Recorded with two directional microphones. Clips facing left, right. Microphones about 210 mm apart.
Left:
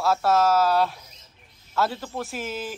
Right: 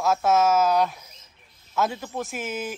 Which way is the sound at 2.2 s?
45° right (ahead or behind).